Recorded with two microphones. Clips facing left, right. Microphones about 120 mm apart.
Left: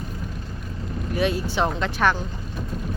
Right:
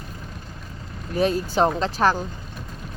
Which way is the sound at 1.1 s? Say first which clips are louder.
Right 2 dB; 40° right (ahead or behind).